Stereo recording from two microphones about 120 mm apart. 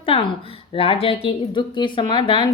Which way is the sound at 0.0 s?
45° left (ahead or behind).